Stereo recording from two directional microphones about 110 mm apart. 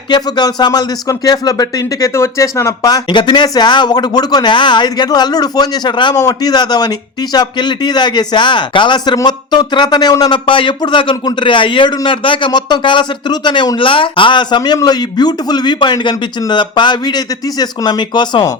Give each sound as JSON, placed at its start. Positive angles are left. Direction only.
{"t": 0.1, "sound": "a man's voice", "side_deg": 40}